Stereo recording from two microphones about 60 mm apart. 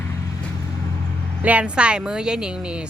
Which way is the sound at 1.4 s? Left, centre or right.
Right.